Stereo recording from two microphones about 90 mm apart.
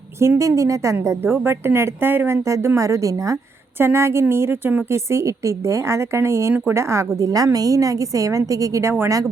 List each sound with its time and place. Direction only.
0.2 s a woman's voice: 35° right (ahead or behind)